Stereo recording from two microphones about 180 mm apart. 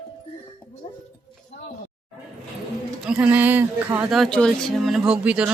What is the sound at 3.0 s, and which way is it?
Speech, 5° right (ahead or behind).